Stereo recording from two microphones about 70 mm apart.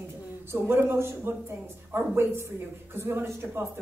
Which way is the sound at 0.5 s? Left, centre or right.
Right.